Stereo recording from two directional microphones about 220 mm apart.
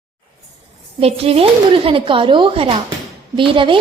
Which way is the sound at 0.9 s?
25° right (ahead or behind).